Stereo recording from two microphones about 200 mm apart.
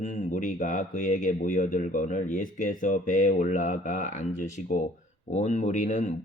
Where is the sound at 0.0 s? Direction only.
40° left (ahead or behind).